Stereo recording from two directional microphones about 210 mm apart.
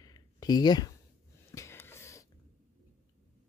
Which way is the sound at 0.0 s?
20° left (ahead or behind).